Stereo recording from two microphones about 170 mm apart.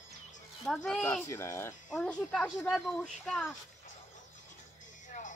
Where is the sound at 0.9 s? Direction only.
5° left (ahead or behind).